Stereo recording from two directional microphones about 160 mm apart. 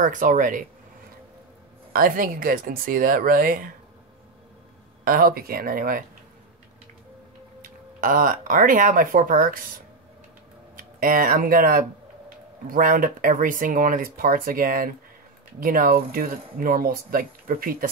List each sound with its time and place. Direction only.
0.0 s speech: 55° right (ahead or behind)
1.9 s speech: 65° right (ahead or behind)
5.0 s speech: 65° right (ahead or behind)
7.6 s speech: 60° right (ahead or behind)
10.8 s speech: 60° right (ahead or behind)